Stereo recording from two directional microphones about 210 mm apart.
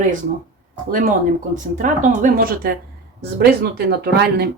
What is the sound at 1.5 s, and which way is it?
Speech, 40° right (ahead or behind).